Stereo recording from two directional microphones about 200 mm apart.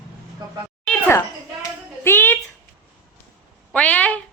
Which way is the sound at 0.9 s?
10° left (ahead or behind).